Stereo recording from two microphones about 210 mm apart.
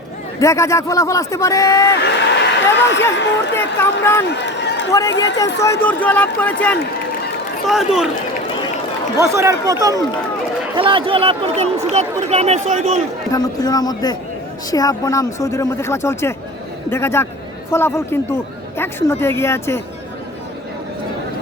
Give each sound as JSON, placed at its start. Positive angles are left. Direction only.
{"t": 0.3, "sound": "speech", "side_deg": 15}
{"t": 2.0, "sound": "speech", "side_deg": 55}
{"t": 4.0, "sound": "speech", "side_deg": 10}
{"t": 4.3, "sound": "run", "side_deg": 55}
{"t": 4.9, "sound": "speech", "side_deg": 15}
{"t": 9.1, "sound": "speech", "side_deg": -15}
{"t": 13.3, "sound": "speech", "side_deg": 15}